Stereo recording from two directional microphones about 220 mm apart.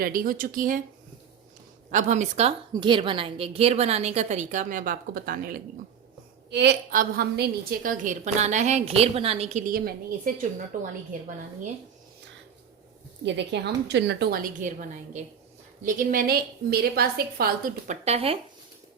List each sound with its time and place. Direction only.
0.0 s a woman's voice: 40° right (ahead or behind)
1.9 s a woman's voice: 35° right (ahead or behind)
13.2 s a woman's voice: 50° right (ahead or behind); by 18.3 s 25° right (ahead or behind)